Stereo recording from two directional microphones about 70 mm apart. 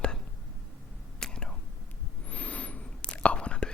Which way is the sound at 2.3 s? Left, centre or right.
Centre.